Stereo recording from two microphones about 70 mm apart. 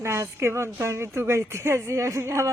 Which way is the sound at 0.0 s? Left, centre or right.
Right.